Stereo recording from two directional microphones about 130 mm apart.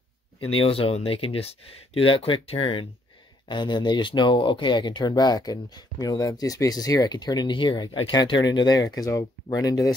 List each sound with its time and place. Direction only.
0.4 s speech: 45° left (ahead or behind); by 9.9 s 25° left (ahead or behind)